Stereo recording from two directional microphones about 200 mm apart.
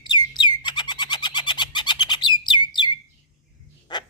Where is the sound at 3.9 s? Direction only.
20° left (ahead or behind).